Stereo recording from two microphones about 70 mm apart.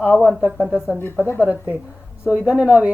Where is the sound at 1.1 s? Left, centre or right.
Left.